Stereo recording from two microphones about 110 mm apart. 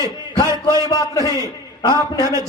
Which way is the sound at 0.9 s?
30° left (ahead or behind).